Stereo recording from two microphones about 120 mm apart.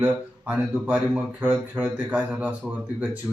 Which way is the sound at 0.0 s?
15° right (ahead or behind).